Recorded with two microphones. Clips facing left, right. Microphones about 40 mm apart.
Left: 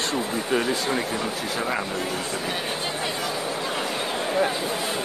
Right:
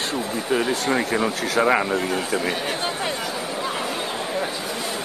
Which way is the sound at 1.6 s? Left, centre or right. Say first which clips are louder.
Right 9 dB; right.